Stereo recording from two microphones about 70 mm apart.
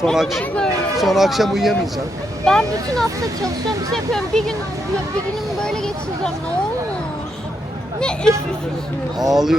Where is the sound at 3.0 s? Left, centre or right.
Right.